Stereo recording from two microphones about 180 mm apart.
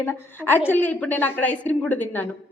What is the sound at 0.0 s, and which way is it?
A woman's voice, 10° left (ahead or behind).